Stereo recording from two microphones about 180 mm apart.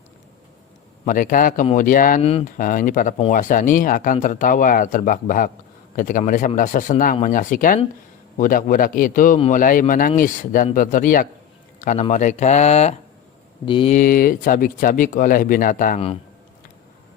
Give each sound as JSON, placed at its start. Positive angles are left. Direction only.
{"t": 1.0, "sound": "speech", "side_deg": 50}
{"t": 2.2, "sound": "speech", "side_deg": 35}
{"t": 2.6, "sound": "a man's voice", "side_deg": 50}
{"t": 13.7, "sound": "speech", "side_deg": 30}
{"t": 13.9, "sound": "speech", "side_deg": 50}